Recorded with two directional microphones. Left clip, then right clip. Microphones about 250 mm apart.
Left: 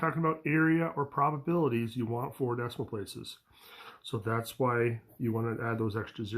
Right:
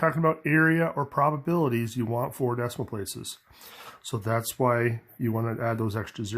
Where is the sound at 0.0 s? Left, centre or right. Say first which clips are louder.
Right 6 dB; right.